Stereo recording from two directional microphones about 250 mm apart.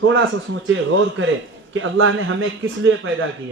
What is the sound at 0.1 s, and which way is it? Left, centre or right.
A man's voice, right.